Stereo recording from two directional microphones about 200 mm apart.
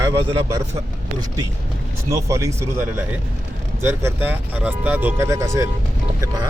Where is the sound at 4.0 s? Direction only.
10° right (ahead or behind).